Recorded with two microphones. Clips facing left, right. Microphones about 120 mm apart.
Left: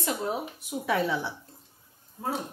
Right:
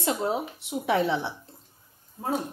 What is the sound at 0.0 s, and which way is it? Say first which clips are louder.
A woman's voice: right 3 dB; 25° right (ahead or behind).